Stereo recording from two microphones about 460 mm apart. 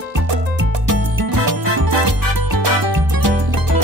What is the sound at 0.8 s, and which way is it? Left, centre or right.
Music, right.